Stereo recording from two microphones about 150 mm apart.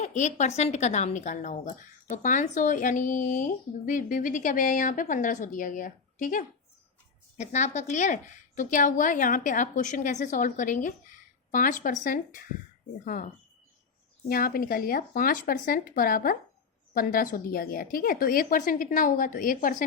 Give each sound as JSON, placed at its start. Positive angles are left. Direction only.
{"t": 0.0, "sound": "a woman's voice", "side_deg": 50}
{"t": 14.3, "sound": "speech", "side_deg": 75}